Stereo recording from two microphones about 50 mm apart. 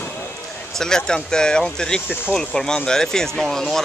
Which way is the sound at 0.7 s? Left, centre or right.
Centre.